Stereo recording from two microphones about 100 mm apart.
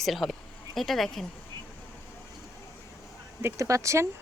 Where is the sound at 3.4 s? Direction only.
25° right (ahead or behind).